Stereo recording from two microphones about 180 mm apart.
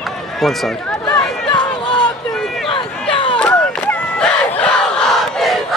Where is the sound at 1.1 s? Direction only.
25° left (ahead or behind).